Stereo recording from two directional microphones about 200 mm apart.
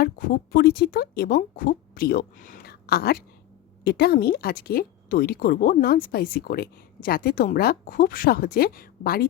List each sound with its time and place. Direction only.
0.0 s a woman's voice: 50° left (ahead or behind)